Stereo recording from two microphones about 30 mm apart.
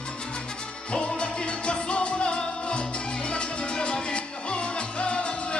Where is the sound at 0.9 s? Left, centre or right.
Left.